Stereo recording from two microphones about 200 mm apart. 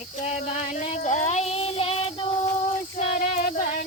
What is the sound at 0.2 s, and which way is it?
Child singing, 35° left (ahead or behind).